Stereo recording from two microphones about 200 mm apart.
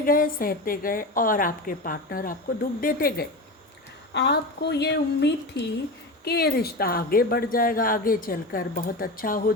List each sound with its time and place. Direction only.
0.0 s speech: 45° left (ahead or behind)
4.1 s speech: 60° left (ahead or behind)